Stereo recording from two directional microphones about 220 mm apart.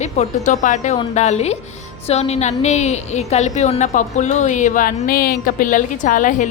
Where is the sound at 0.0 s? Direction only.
35° left (ahead or behind).